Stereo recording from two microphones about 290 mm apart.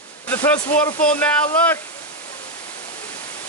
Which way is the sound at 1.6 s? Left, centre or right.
Centre.